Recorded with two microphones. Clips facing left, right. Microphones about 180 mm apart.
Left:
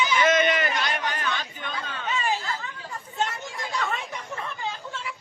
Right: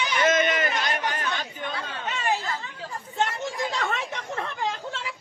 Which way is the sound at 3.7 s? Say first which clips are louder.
Right 1 dB; 85° right.